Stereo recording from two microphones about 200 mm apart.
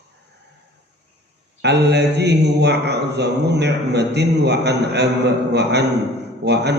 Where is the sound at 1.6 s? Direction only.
55° right (ahead or behind).